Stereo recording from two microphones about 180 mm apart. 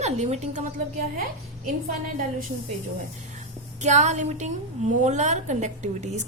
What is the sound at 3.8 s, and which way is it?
A woman's voice, 40° right (ahead or behind).